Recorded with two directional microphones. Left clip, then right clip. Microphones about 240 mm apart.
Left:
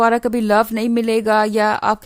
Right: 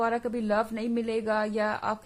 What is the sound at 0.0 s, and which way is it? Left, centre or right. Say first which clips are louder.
A woman's voice: left 12 dB; left.